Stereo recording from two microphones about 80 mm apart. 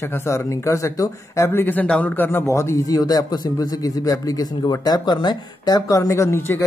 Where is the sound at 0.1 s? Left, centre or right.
Left.